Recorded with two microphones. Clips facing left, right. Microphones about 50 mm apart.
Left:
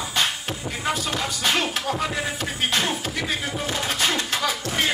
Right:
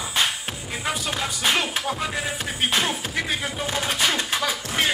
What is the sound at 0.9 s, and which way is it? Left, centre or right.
Music, centre.